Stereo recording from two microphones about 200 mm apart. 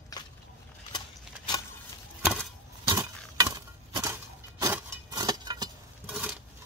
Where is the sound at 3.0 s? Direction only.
15° right (ahead or behind).